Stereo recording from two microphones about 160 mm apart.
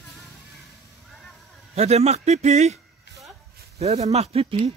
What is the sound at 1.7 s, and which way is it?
Speech, 40° right (ahead or behind).